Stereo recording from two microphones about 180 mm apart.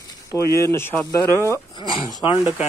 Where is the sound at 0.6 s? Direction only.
15° left (ahead or behind).